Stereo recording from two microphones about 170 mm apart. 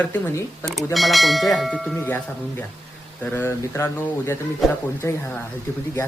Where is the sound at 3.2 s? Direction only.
10° left (ahead or behind).